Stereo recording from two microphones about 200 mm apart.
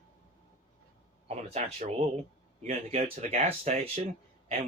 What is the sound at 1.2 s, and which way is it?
Speech, 35° right (ahead or behind).